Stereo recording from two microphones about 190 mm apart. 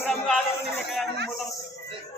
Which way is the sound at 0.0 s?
Centre (ahead or behind).